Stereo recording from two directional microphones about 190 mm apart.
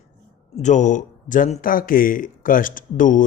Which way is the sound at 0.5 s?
40° left (ahead or behind).